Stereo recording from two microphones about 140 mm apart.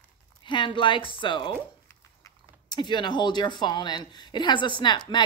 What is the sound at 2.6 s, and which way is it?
Speech, 35° left (ahead or behind).